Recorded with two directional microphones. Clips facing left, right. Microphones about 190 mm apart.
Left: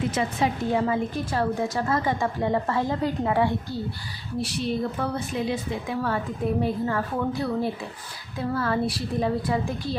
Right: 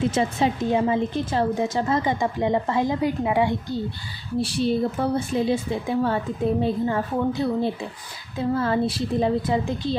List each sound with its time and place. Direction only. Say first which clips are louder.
0.1 s a woman's voice: right 3 dB; 25° right (ahead or behind)
4.4 s a woman's voice: right 5 dB; 30° right (ahead or behind)